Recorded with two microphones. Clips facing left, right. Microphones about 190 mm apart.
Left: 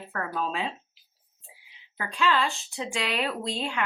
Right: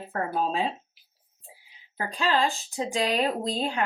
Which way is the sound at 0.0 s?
35° right (ahead or behind).